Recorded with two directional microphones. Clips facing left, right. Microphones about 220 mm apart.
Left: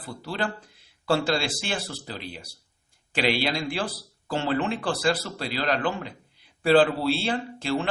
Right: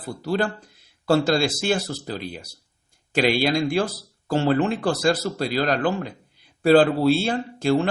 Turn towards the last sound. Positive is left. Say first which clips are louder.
# right 6 dB
turn(degrees=-45)  # may be behind; listen again after turning